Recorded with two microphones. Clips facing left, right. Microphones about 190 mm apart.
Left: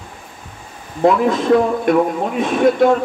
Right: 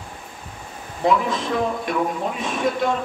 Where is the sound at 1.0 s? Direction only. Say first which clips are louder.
Left 5 dB; 55° left (ahead or behind).